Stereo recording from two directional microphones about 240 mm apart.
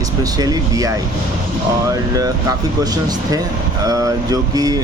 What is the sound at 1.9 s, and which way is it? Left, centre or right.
Speech, centre.